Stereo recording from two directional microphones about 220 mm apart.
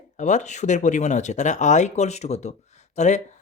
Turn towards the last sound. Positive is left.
turn(degrees=30)  # may be behind; listen again after turning